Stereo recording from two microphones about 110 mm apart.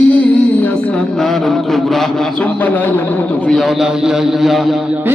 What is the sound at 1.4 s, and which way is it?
Speech, centre (ahead or behind).